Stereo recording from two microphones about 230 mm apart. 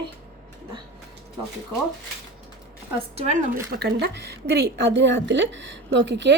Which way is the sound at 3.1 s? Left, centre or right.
Right.